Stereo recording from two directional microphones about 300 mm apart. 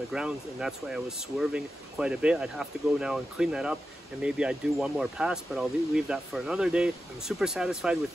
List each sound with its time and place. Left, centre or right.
0.1 s speech: centre